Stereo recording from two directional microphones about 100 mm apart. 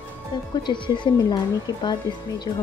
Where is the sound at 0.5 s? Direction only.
50° left (ahead or behind).